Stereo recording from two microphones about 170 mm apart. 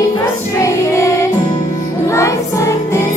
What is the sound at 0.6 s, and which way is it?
Music, 20° left (ahead or behind).